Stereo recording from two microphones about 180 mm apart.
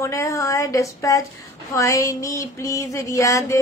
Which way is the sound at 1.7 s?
15° left (ahead or behind).